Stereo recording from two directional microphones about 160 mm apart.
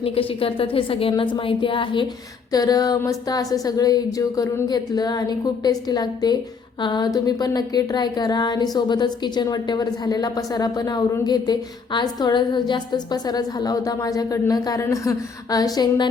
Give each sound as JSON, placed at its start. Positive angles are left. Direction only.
{"t": 0.0, "sound": "a woman's voice", "side_deg": 35}